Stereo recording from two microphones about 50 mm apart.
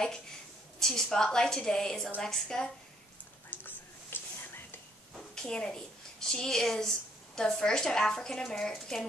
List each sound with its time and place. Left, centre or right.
0.7 s a woman's voice: centre
3.4 s a sound: left
5.1 s a woman's voice: centre